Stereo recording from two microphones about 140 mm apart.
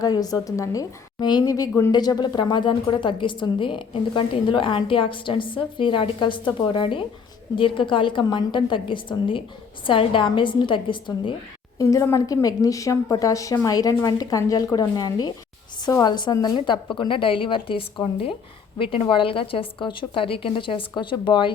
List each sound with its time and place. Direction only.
0.0 s a woman's voice: 25° left (ahead or behind)
11.8 s a woman's voice: 25° left (ahead or behind)